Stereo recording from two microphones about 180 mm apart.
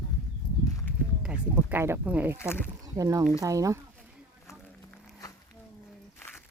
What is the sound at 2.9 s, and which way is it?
Speech, 20° right (ahead or behind).